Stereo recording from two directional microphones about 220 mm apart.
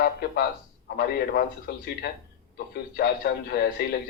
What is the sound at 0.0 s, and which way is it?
Speech, 45° left (ahead or behind).